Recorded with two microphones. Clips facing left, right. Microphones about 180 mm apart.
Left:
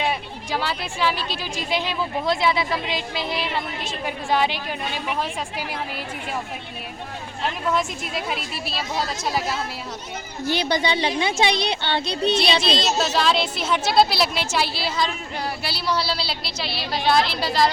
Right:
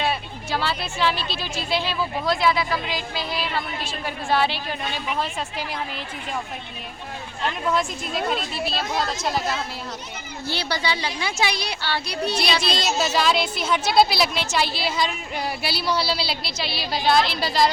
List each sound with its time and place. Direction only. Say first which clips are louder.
0.0 s speech: even; 15° left (ahead or behind)
7.4 s a woman's voice: even; 5° left (ahead or behind)
10.5 s speech: left 4 dB; 20° left (ahead or behind)
13.0 s a woman's voice: even; centre (ahead or behind)
15.6 s a woman's voice: right 1 dB; 5° right (ahead or behind)